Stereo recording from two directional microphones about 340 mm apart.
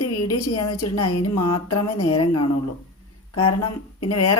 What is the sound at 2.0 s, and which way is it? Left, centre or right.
Speech, centre.